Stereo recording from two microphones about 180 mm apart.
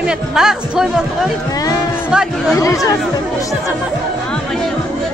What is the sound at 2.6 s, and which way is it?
Speech, 20° left (ahead or behind).